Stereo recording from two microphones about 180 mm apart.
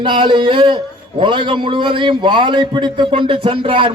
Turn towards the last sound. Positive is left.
turn(degrees=-30)  # may be behind; listen again after turning